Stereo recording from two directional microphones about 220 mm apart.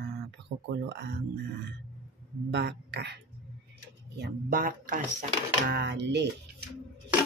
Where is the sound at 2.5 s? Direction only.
50° right (ahead or behind).